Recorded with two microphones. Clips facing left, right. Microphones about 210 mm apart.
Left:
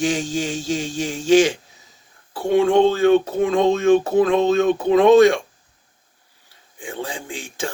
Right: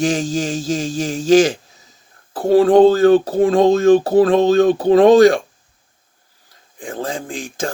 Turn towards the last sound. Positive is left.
turn(degrees=-35)  # may be behind; listen again after turning